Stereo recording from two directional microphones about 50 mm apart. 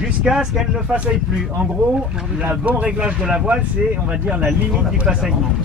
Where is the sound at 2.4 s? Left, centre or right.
Right.